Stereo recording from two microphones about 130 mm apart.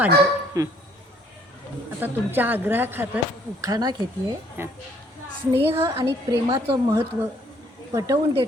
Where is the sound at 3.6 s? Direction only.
30° right (ahead or behind).